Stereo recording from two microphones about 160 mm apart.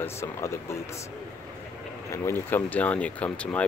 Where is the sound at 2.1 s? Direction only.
15° left (ahead or behind).